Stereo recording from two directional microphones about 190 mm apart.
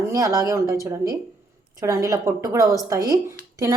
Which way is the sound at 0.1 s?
20° right (ahead or behind).